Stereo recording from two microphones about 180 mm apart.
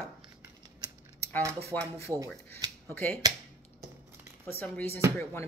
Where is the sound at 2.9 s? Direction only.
10° left (ahead or behind).